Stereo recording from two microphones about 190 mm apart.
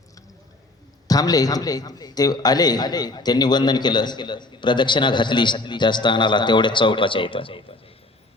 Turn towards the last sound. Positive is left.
turn(degrees=30)  # may be behind; listen again after turning